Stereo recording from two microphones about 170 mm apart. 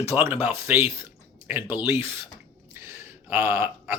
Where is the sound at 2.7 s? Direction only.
15° right (ahead or behind).